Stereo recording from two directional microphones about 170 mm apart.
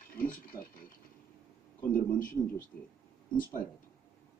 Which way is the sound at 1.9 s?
50° left (ahead or behind).